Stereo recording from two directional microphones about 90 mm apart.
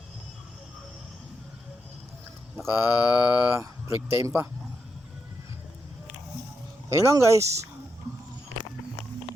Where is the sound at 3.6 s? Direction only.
35° right (ahead or behind).